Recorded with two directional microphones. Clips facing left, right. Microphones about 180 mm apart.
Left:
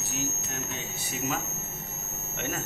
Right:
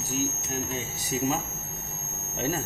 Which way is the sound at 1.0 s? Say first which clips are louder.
Right 5 dB; 30° right (ahead or behind).